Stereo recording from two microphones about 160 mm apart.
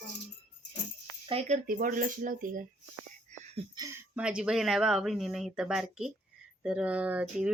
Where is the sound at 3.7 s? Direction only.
20° right (ahead or behind).